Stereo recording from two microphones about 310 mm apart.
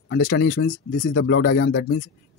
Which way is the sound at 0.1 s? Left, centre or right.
Left.